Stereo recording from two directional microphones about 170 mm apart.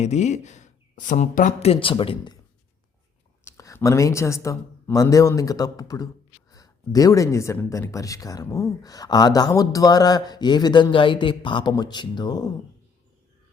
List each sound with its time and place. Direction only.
0.0 s speech: 40° left (ahead or behind)
3.4 s speech: 15° left (ahead or behind)